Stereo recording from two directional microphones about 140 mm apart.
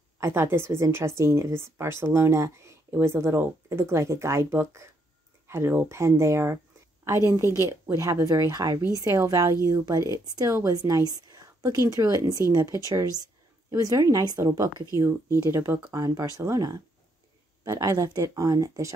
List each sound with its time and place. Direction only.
0.2 s a woman's voice: 20° right (ahead or behind)